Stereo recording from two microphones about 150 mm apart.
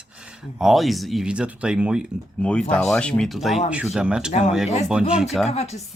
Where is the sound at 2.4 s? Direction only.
5° left (ahead or behind).